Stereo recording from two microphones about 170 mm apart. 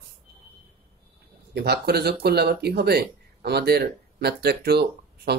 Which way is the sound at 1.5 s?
70° right (ahead or behind).